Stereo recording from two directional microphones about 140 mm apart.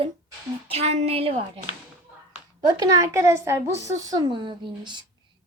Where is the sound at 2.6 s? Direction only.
25° right (ahead or behind).